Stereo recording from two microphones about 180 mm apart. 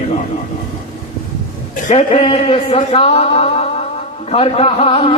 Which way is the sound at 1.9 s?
35° left (ahead or behind).